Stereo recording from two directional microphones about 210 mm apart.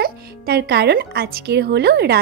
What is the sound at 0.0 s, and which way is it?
Speech, 50° right (ahead or behind).